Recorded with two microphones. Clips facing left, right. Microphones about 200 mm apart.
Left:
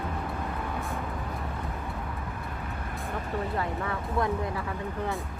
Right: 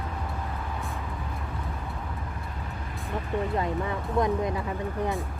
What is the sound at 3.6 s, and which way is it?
Speech, 20° right (ahead or behind).